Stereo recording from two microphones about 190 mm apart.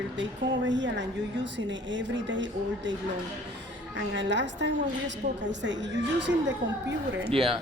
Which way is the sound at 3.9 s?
70° right (ahead or behind).